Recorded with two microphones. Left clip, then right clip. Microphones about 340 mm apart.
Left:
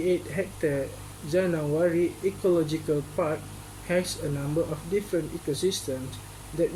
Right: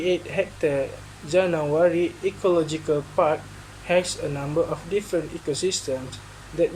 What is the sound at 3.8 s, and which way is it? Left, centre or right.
Speech, right.